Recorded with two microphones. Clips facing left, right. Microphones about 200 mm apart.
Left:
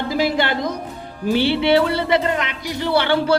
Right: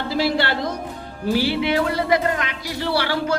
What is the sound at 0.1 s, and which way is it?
A woman's voice, 15° left (ahead or behind).